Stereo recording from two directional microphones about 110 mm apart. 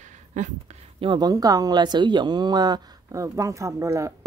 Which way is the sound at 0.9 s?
50° right (ahead or behind).